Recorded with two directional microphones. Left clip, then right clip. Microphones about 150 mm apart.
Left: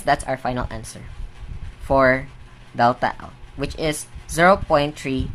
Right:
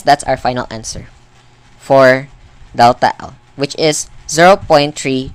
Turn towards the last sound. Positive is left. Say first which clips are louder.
# right 8 dB
turn(degrees=-40)  # may be behind; listen again after turning